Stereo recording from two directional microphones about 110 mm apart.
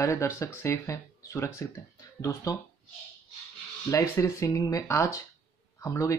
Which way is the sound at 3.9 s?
25° left (ahead or behind).